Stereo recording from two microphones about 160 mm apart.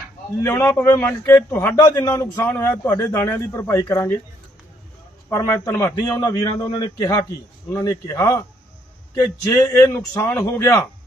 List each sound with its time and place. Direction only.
0.4 s a man's voice: 15° left (ahead or behind)
5.3 s a man's voice: 20° left (ahead or behind)